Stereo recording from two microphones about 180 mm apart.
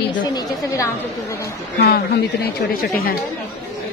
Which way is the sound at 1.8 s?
60° left (ahead or behind).